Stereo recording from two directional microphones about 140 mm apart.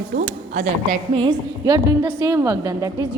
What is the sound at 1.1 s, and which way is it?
A woman's voice, 35° right (ahead or behind).